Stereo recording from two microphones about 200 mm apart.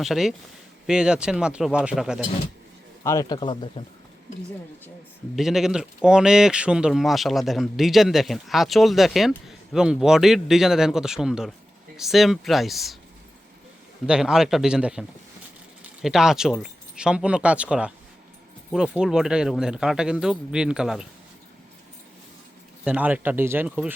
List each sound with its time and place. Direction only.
0.0 s speech: centre (ahead or behind)
3.0 s speech: 15° left (ahead or behind)
5.4 s speech: centre (ahead or behind)
14.1 s speech: 5° right (ahead or behind)
22.8 s speech: 5° right (ahead or behind)